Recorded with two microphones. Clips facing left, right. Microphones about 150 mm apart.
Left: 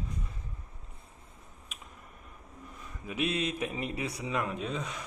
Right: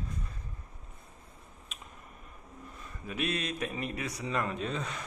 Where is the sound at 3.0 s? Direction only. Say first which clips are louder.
Left 2 dB; 20° left (ahead or behind).